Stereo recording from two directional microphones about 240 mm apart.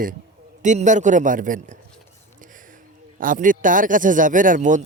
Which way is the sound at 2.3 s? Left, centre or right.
Right.